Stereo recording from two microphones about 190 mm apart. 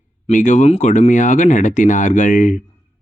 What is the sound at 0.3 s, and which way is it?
Speech, 40° left (ahead or behind).